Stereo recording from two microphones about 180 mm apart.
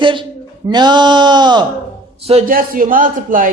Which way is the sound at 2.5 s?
50° right (ahead or behind).